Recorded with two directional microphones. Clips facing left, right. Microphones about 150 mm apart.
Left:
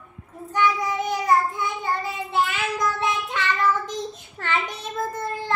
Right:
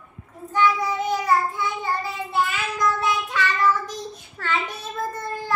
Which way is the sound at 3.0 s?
25° left (ahead or behind).